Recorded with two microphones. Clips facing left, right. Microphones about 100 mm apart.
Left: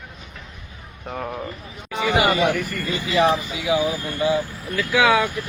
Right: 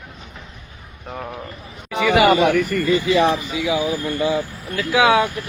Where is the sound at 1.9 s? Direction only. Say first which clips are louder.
Right 4 dB; 70° right (ahead or behind).